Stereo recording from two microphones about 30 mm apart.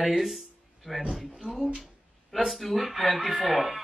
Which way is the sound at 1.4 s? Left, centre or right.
Centre.